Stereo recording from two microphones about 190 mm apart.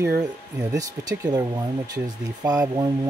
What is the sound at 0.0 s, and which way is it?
Speech, 10° right (ahead or behind).